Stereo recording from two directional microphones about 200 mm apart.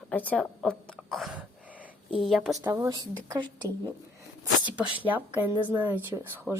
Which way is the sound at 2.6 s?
15° right (ahead or behind).